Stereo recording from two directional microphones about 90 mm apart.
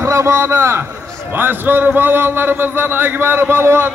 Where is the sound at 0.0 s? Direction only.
30° right (ahead or behind).